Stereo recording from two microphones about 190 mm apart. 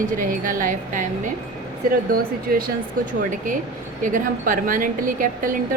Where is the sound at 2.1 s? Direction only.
50° right (ahead or behind).